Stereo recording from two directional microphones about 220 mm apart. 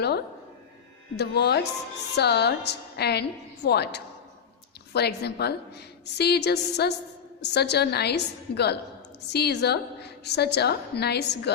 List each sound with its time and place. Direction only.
1.1 s a woman's voice: 50° left (ahead or behind)